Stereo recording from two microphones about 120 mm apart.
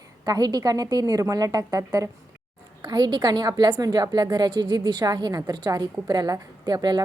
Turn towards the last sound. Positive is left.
turn(degrees=-35)  # may be behind; listen again after turning